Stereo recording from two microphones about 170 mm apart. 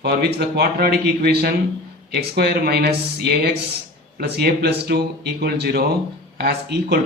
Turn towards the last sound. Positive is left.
turn(degrees=-75)  # may be behind; listen again after turning